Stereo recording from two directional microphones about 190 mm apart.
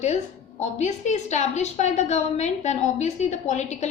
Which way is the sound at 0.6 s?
35° left (ahead or behind).